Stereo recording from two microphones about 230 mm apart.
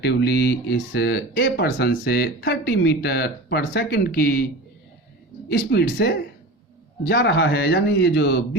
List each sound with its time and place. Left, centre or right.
0.0 s speech: left
5.5 s speech: left